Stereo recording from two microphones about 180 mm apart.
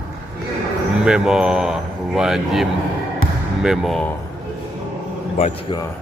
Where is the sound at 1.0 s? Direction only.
5° right (ahead or behind).